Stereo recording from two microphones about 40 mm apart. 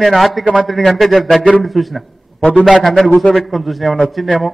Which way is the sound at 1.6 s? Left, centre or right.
Centre.